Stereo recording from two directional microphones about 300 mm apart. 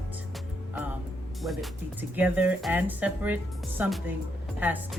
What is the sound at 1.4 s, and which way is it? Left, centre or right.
Speech, centre.